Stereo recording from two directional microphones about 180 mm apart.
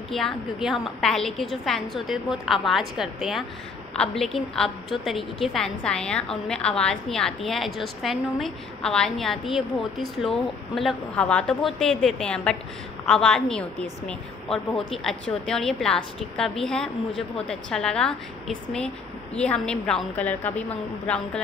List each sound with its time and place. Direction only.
0.1 s a woman's voice: centre (ahead or behind)
19.3 s a woman's voice: 5° left (ahead or behind)